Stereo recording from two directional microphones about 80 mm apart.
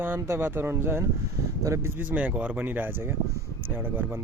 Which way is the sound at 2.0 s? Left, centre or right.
Right.